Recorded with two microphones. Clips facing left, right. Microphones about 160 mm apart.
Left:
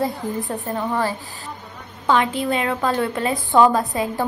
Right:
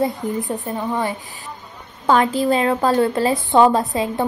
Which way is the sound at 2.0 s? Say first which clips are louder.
Right 3 dB; 40° right (ahead or behind).